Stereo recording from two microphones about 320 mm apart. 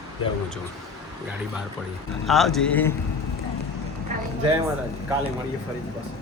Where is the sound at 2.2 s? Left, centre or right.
Centre.